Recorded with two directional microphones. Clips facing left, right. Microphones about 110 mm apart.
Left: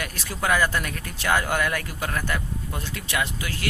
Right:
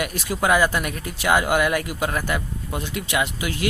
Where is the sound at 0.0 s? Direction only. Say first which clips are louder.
Right 5 dB; 15° right (ahead or behind).